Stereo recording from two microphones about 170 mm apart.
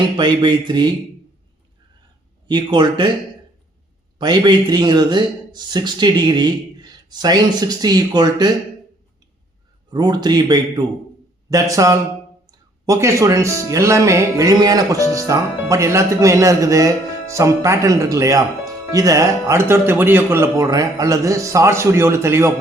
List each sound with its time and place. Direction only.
0.2 s a man's voice: 25° right (ahead or behind)
2.5 s a man's voice: 25° right (ahead or behind)
4.2 s a man's voice: 25° right (ahead or behind)
9.9 s a man's voice: 25° right (ahead or behind)